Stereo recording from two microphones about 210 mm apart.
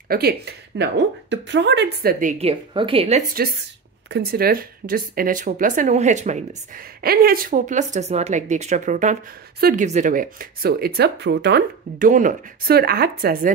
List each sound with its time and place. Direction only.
0.1 s a woman's voice: 50° right (ahead or behind); by 3.3 s 30° right (ahead or behind)
4.1 s speech: 45° right (ahead or behind)
12.1 s a woman's voice: 40° right (ahead or behind)